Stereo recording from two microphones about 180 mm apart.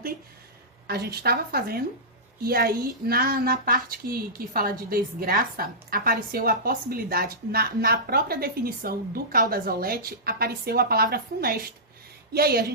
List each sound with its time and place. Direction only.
0.9 s a woman's voice: 60° right (ahead or behind)